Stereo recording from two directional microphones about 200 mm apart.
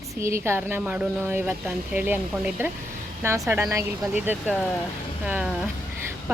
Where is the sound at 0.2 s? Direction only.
15° right (ahead or behind).